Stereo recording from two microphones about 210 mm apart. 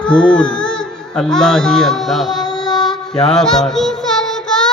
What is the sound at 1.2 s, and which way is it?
Speech, 5° left (ahead or behind).